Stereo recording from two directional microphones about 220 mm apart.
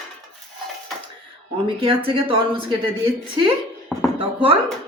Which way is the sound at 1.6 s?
25° right (ahead or behind).